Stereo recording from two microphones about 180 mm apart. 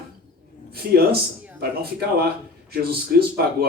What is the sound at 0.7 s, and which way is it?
Speech, 55° right (ahead or behind).